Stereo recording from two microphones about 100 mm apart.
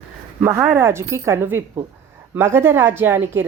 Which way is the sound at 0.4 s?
25° right (ahead or behind).